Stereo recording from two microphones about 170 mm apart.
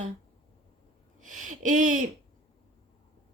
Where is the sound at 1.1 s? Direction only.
50° right (ahead or behind).